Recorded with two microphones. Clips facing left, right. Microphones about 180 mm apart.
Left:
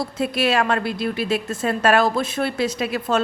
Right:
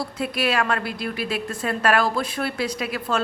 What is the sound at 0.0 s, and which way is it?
A woman's voice, 25° left (ahead or behind).